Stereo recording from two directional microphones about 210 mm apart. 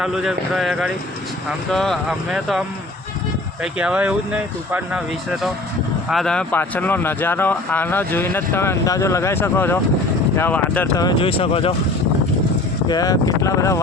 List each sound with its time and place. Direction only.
0.0 s speech: 5° right (ahead or behind)
11.0 s speech: 25° left (ahead or behind)
12.9 s speech: 15° left (ahead or behind)